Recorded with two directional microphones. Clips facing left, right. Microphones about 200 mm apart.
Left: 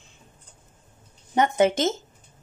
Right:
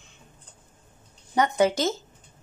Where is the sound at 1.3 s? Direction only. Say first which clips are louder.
Left 2 dB; 25° left (ahead or behind).